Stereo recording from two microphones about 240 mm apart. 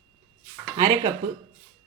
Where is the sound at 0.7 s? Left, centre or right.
Centre.